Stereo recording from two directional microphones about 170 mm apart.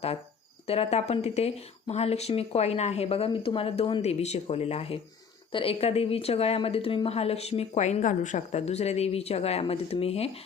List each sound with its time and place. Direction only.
0.7 s a woman's voice: 35° left (ahead or behind)